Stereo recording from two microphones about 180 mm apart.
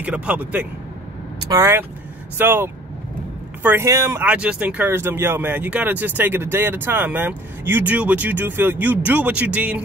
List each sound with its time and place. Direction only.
0.0 s speech: 5° right (ahead or behind)